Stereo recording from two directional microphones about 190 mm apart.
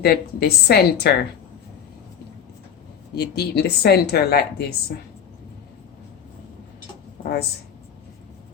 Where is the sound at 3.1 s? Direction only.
60° left (ahead or behind).